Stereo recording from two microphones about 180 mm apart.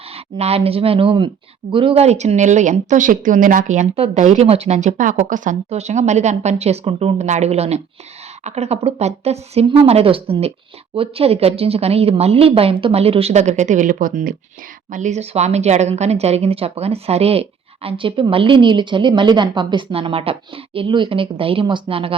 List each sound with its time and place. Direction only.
0.1 s a woman's voice: 35° right (ahead or behind)